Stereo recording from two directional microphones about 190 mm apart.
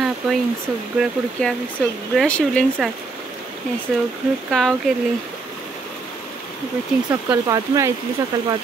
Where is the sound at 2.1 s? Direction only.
5° left (ahead or behind).